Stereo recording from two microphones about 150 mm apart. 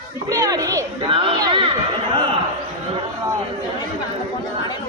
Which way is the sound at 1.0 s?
35° right (ahead or behind).